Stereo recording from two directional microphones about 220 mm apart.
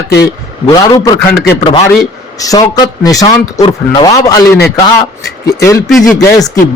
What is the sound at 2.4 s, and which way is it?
A man's voice, 15° left (ahead or behind).